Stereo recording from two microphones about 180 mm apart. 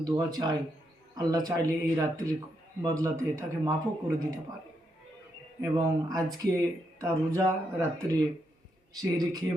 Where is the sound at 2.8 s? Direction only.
15° right (ahead or behind).